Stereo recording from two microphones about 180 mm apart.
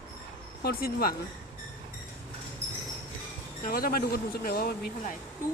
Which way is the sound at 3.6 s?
50° left (ahead or behind).